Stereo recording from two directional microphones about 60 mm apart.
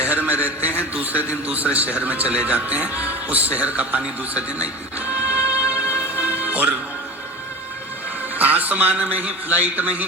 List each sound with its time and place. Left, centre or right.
0.0 s a sound: right
0.8 s a man's voice: right
8.4 s speech: right